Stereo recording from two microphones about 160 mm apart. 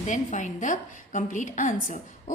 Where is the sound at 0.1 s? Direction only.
50° left (ahead or behind).